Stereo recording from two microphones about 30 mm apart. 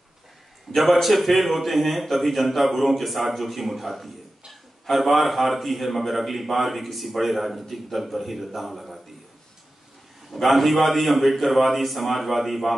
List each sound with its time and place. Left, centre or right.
0.7 s a man's voice: centre
1.0 s a man's voice: centre
10.3 s a man's voice: centre